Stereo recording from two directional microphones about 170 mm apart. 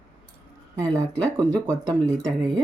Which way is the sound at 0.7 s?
20° right (ahead or behind).